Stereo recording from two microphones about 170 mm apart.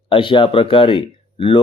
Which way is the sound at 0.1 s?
30° left (ahead or behind).